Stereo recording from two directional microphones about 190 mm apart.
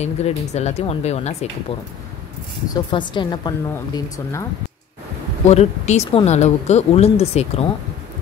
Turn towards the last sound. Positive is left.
turn(degrees=35)  # may be behind; listen again after turning